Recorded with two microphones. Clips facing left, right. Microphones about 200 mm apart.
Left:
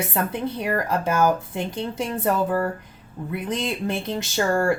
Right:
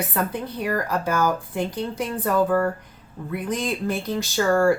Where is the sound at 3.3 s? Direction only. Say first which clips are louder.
Right 1 dB; 25° left (ahead or behind).